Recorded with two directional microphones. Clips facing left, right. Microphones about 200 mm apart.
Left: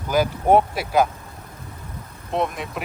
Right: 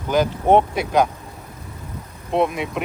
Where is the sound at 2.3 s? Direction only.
Centre (ahead or behind).